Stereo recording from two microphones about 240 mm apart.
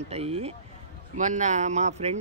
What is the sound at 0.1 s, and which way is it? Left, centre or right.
Speech, right.